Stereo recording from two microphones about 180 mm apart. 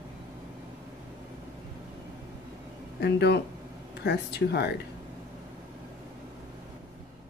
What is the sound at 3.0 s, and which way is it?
Speech, 65° left (ahead or behind).